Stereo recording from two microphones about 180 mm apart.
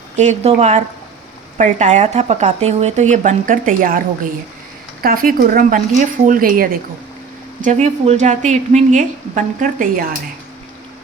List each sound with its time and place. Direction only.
0.2 s a woman's voice: 40° right (ahead or behind)
5.0 s speech: 50° right (ahead or behind)
7.6 s a woman's voice: 40° right (ahead or behind)